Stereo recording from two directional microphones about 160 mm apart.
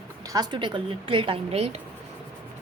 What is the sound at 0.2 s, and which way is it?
A child's voice, 25° right (ahead or behind).